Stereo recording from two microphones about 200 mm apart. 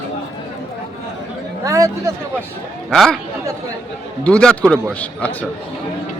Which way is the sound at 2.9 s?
Centre (ahead or behind).